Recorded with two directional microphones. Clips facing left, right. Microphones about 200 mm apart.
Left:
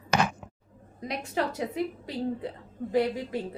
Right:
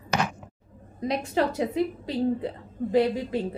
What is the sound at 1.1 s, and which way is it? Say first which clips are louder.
A woman's voice: right 5 dB; 25° right (ahead or behind).